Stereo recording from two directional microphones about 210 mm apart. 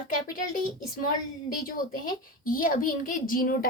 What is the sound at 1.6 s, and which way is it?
A woman's voice, 40° left (ahead or behind).